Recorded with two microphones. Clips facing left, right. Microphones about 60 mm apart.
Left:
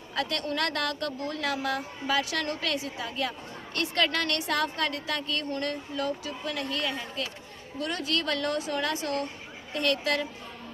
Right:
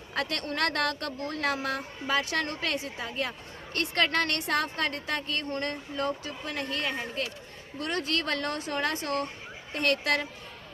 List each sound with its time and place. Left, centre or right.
0.1 s a woman's voice: right